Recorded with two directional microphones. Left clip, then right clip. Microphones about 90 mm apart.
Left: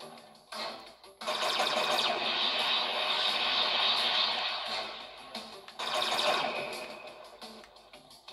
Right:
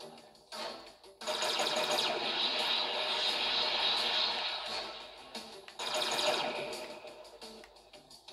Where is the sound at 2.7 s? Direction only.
15° right (ahead or behind).